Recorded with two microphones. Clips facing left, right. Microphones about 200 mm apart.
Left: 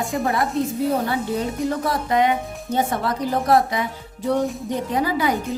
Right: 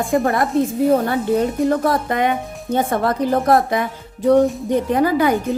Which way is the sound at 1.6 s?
55° right (ahead or behind).